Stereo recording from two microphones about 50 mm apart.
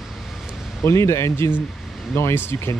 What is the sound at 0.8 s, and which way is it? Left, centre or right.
Speech, left.